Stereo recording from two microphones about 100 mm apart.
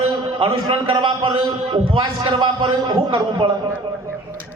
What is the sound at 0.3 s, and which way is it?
Speech, 65° right (ahead or behind).